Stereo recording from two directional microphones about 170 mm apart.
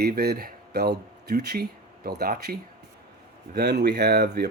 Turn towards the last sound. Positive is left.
turn(degrees=-65)  # may be behind; listen again after turning